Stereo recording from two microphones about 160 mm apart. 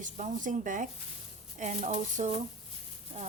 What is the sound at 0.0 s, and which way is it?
Speech, 50° right (ahead or behind).